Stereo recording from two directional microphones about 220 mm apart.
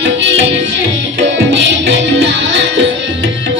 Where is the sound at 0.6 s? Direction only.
55° right (ahead or behind).